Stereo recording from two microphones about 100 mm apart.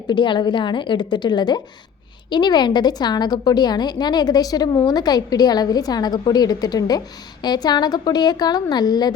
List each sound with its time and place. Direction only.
0.1 s a woman's voice: 50° left (ahead or behind)